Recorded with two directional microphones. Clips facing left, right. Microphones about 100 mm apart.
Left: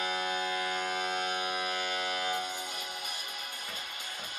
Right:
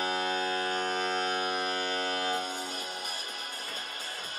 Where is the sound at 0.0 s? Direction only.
45° right (ahead or behind).